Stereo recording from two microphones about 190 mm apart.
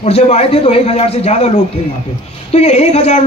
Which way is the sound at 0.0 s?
35° left (ahead or behind).